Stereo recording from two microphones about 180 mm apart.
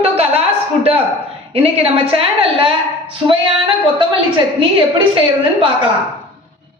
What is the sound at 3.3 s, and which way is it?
Music, 30° right (ahead or behind).